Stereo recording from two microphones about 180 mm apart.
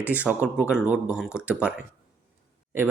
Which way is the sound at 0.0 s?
10° right (ahead or behind).